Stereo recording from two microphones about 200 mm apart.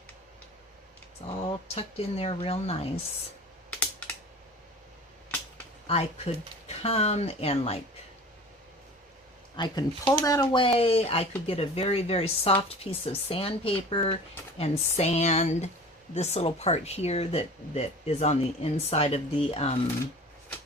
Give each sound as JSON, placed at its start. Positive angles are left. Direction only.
{"t": 1.4, "sound": "speech", "side_deg": 30}
{"t": 3.7, "sound": "computer keyboard", "side_deg": 5}
{"t": 5.9, "sound": "speech", "side_deg": 30}
{"t": 9.6, "sound": "speech", "side_deg": 20}